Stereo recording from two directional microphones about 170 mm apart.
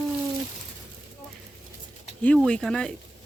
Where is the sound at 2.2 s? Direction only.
5° left (ahead or behind).